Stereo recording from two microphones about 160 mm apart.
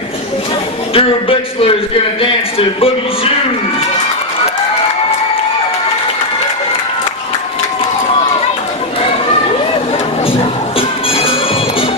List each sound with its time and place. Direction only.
0.9 s speech: 35° left (ahead or behind)
10.2 s music: 35° left (ahead or behind)